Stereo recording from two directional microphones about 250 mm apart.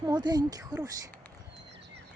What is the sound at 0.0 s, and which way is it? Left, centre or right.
Speech, centre.